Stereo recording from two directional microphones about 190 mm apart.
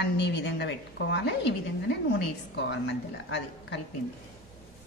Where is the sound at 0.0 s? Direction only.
65° left (ahead or behind).